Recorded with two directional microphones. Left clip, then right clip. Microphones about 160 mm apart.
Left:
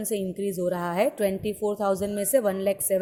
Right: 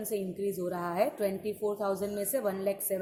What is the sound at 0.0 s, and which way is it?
A woman's voice, 50° left (ahead or behind).